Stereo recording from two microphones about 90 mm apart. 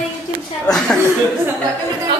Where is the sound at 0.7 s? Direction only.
5° left (ahead or behind).